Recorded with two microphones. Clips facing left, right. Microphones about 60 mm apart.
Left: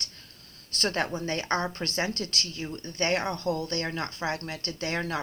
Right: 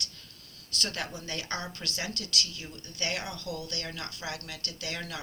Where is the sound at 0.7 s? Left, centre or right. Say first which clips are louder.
Left 7 dB; left.